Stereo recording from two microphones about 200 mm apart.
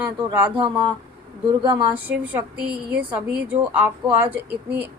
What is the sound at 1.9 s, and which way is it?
Speech, 10° right (ahead or behind).